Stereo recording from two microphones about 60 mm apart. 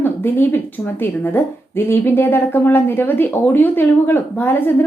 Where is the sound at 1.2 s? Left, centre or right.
Left.